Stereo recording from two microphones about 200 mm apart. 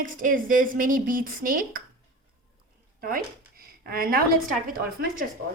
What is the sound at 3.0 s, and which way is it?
A woman's voice, 45° right (ahead or behind).